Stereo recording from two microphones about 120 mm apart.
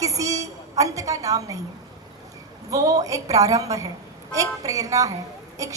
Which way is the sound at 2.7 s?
30° right (ahead or behind).